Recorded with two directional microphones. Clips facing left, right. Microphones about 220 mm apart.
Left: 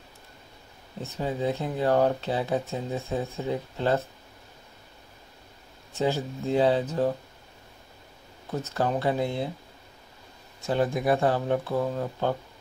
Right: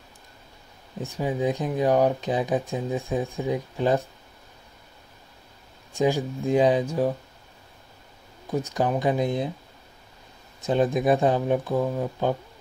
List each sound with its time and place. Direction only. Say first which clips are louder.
1.0 s speech: right 3 dB; 15° right (ahead or behind)
5.9 s speech: right 4 dB; 15° right (ahead or behind)
8.5 s speech: right 3 dB; 15° right (ahead or behind)
10.6 s speech: right 3 dB; 20° right (ahead or behind)